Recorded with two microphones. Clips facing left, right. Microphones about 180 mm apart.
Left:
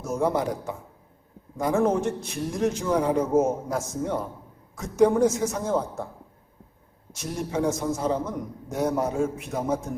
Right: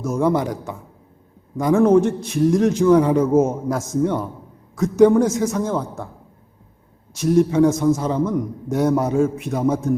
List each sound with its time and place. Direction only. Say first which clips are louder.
0.0 s a man's voice: right 5 dB; 90° right
7.2 s a man's voice: right 12 dB; 90° right